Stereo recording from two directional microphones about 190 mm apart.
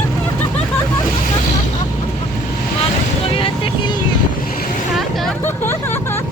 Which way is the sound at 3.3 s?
25° left (ahead or behind).